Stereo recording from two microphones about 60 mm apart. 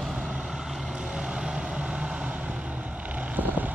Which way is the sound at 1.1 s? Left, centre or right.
Centre.